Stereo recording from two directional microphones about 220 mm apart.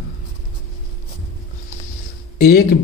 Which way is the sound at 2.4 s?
45° left (ahead or behind).